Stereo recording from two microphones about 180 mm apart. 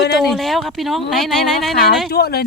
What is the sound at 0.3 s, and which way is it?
Speech, centre (ahead or behind).